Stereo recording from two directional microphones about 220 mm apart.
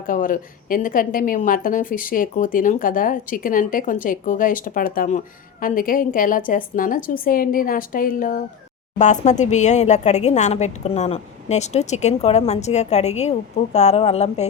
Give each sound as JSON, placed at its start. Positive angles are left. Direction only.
{"t": 0.1, "sound": "a woman's voice", "side_deg": 40}